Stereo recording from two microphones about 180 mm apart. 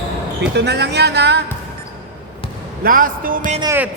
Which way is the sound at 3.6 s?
15° right (ahead or behind).